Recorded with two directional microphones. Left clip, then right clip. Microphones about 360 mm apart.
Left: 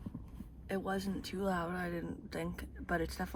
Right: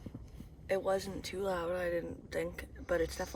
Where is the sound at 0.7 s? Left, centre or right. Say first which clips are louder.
Right 5 dB; centre.